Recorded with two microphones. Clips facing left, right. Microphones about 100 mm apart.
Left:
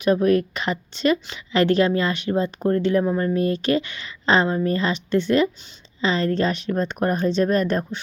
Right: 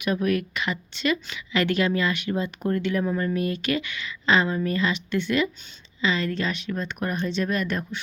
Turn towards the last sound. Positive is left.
turn(degrees=40)  # may be behind; listen again after turning